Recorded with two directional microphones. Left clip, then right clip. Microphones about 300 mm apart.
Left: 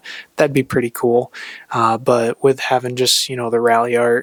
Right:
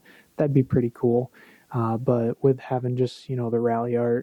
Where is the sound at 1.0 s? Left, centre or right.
Left.